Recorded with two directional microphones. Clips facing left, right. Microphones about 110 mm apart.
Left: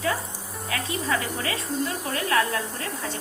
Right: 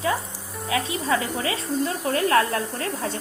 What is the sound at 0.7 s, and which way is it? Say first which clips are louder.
Speech: right 4 dB; 25° right (ahead or behind).